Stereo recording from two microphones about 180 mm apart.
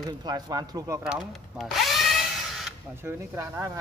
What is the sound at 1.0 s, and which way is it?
Speech, centre (ahead or behind).